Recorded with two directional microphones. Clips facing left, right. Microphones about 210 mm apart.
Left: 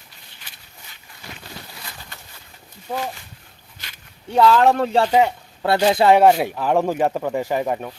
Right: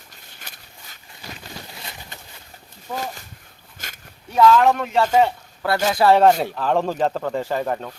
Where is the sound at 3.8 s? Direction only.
50° right (ahead or behind).